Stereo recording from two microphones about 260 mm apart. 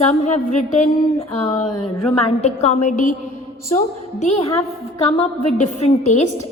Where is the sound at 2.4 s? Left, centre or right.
Left.